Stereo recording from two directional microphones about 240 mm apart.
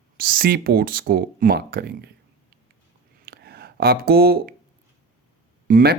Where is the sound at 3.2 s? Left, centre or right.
Right.